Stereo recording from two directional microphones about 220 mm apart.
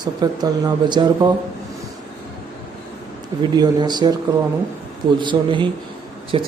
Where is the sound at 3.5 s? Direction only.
20° right (ahead or behind).